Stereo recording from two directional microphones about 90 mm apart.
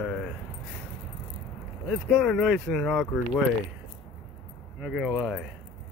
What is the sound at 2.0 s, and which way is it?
Speech, 5° left (ahead or behind).